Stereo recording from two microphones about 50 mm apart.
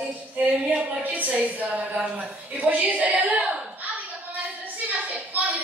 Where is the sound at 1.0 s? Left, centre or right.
Right.